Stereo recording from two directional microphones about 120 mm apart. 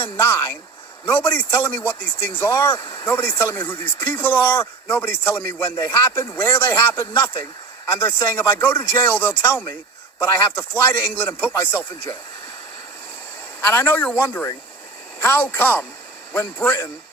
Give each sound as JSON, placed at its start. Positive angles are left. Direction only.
{"t": 0.0, "sound": "speech", "side_deg": 20}
{"t": 13.7, "sound": "speech", "side_deg": 15}